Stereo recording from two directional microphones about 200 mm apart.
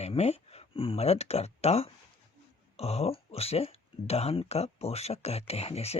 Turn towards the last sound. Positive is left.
turn(degrees=30)  # may be behind; listen again after turning